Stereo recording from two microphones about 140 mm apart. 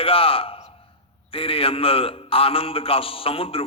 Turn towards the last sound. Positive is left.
turn(degrees=40)  # may be behind; listen again after turning